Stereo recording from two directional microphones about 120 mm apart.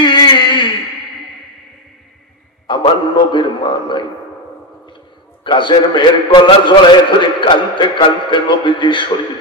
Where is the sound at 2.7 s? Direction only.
40° left (ahead or behind).